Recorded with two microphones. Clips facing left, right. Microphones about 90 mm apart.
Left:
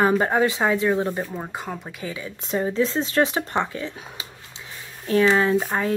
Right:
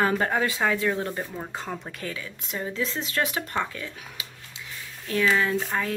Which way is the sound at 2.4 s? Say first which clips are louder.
Left 8 dB; 35° left (ahead or behind).